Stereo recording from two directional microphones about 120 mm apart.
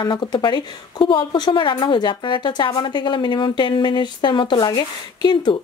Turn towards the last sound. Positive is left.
turn(degrees=35)  # may be behind; listen again after turning